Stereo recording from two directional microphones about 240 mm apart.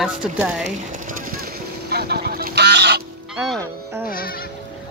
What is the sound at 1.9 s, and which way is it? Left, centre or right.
Goose, right.